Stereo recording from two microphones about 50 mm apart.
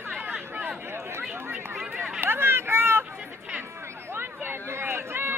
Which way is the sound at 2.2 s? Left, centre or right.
Right.